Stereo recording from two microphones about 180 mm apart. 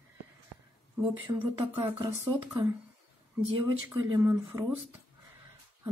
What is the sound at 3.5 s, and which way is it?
Speech, 20° right (ahead or behind).